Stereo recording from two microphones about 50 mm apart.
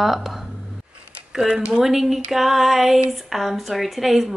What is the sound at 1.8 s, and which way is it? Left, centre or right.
A woman's voice, centre.